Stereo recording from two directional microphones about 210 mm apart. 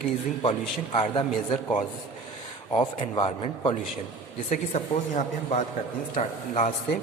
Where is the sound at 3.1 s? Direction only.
25° left (ahead or behind).